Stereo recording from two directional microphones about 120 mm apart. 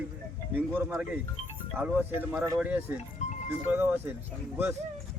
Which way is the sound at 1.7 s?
10° right (ahead or behind).